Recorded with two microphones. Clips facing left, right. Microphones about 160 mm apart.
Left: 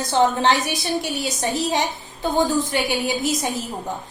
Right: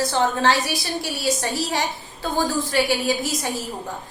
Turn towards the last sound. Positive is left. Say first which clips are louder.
# left 1 dB
turn(degrees=20)  # may be behind; listen again after turning